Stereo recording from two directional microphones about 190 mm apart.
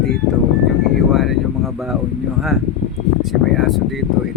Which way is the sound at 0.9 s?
Centre (ahead or behind).